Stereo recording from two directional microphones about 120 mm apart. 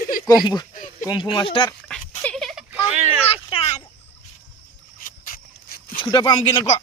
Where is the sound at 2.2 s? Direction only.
5° left (ahead or behind).